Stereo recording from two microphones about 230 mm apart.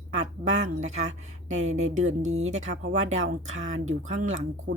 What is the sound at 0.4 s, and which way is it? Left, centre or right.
Speech, right.